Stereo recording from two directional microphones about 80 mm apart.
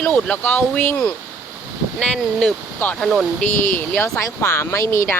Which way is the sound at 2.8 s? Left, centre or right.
Left.